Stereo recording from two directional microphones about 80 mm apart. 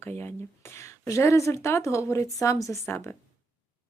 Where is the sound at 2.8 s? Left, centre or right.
Left.